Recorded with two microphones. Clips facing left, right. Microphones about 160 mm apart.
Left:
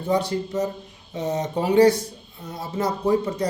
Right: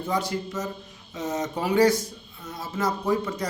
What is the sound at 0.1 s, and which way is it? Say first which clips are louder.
Speech: left 6 dB; 30° left (ahead or behind).